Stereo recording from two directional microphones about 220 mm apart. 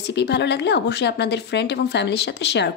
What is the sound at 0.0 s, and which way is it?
A woman's voice, 50° left (ahead or behind).